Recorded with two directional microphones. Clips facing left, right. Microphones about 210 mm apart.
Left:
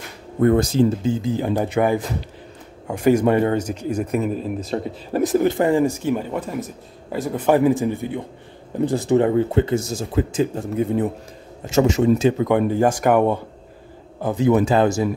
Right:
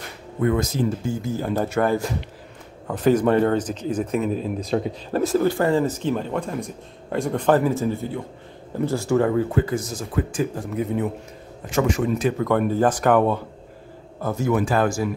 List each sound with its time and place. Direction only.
0.4 s speech: 35° left (ahead or behind); by 4.7 s 5° left (ahead or behind)
5.1 s speech: 15° left (ahead or behind)